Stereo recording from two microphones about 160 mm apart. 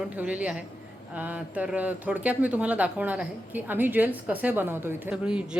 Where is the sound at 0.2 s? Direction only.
10° right (ahead or behind).